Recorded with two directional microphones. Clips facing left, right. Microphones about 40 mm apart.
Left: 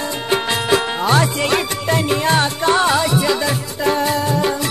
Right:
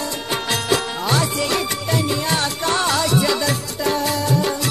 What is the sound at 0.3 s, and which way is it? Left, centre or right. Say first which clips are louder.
Music: left 4 dB; left.